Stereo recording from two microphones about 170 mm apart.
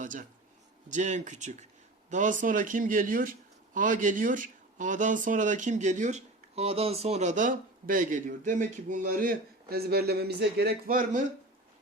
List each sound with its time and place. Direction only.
0.0 s speech: 50° right (ahead or behind)